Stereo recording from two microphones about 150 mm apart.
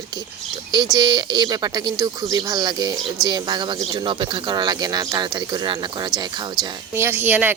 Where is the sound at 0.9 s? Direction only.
30° right (ahead or behind).